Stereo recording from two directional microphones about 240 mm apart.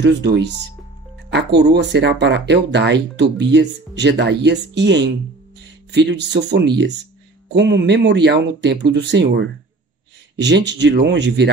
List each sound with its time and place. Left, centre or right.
0.0 s speech: right